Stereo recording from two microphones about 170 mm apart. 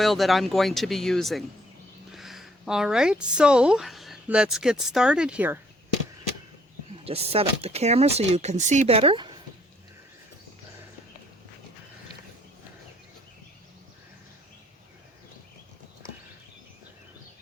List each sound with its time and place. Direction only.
0.0 s speech: centre (ahead or behind)
7.0 s speech: 35° right (ahead or behind)